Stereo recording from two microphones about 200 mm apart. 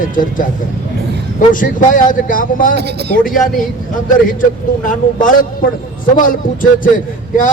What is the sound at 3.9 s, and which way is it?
A man's voice, 45° left (ahead or behind).